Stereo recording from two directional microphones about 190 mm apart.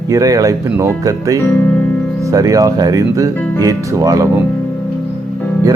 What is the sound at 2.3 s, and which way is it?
Speech, 20° right (ahead or behind).